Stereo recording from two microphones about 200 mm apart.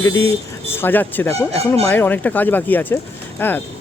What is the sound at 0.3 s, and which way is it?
Speech, 10° left (ahead or behind).